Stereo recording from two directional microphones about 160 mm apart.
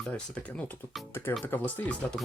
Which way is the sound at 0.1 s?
5° left (ahead or behind).